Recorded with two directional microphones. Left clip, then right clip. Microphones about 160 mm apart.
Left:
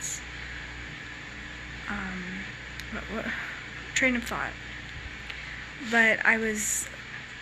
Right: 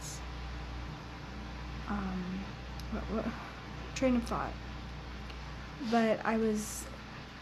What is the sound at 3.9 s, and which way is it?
Speech, 10° right (ahead or behind).